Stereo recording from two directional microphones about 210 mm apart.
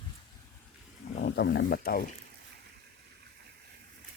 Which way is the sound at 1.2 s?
55° left (ahead or behind).